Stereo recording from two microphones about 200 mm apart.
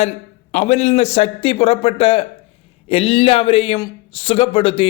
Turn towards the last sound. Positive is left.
turn(degrees=25)  # may be behind; listen again after turning